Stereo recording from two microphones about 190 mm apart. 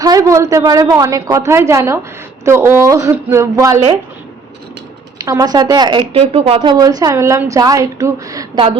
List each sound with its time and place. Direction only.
0.0 s a woman's voice: 20° right (ahead or behind)
5.1 s speech: 20° right (ahead or behind)